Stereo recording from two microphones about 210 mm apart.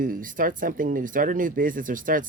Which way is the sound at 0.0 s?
40° right (ahead or behind).